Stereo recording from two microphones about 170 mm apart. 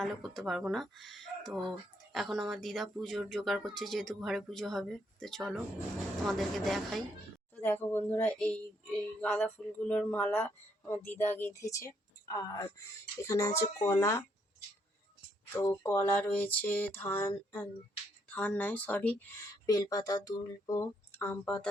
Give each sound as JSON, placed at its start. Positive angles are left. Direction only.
{"t": 0.0, "sound": "speech", "side_deg": 0}
{"t": 7.5, "sound": "speech", "side_deg": 10}
{"t": 15.5, "sound": "speech", "side_deg": 15}
{"t": 19.5, "sound": "speech", "side_deg": 20}